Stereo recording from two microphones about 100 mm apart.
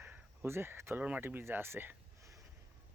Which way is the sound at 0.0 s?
25° right (ahead or behind).